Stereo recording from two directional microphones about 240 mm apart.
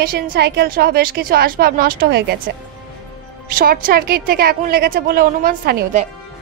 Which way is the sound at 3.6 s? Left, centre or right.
Right.